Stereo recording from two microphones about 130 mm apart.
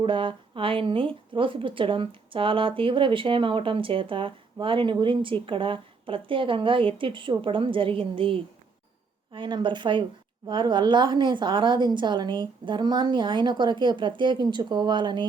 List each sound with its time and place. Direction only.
0.0 s a woman's voice: 40° right (ahead or behind)